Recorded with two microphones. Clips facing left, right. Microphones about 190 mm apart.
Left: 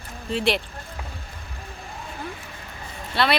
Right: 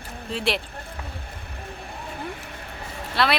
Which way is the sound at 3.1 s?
Centre (ahead or behind).